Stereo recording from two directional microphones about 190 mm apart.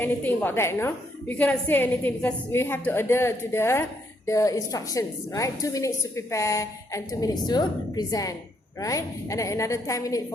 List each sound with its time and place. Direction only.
0.0 s a woman's voice: 10° left (ahead or behind)